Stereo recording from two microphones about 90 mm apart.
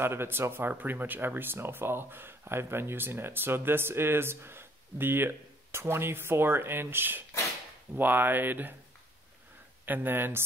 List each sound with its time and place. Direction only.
0.0 s speech: 25° right (ahead or behind)
9.8 s speech: 20° right (ahead or behind)